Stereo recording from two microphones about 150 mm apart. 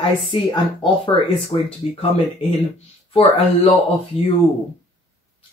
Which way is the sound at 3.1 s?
40° left (ahead or behind).